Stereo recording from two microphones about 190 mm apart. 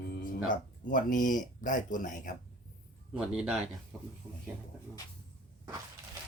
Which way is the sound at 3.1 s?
5° right (ahead or behind).